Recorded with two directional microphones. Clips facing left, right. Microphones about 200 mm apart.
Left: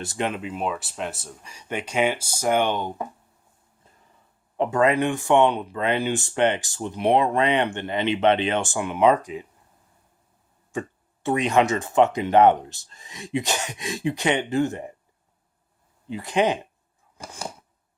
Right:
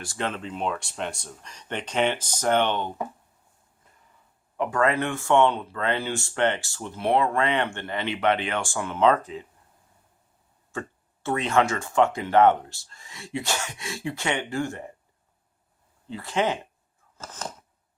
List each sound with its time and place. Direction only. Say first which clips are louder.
0.0 s speech: left 3 dB; 20° left (ahead or behind)
4.5 s speech: left 3 dB; 25° left (ahead or behind)
10.7 s speech: left 4 dB; 15° left (ahead or behind)
16.0 s speech: left 4 dB; 15° left (ahead or behind)
17.2 s a sound: left 1 dB; 10° left (ahead or behind)